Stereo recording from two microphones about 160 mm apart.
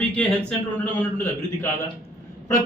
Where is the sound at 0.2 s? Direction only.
5° left (ahead or behind).